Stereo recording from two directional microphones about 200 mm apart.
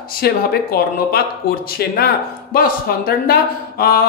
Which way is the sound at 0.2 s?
50° left (ahead or behind).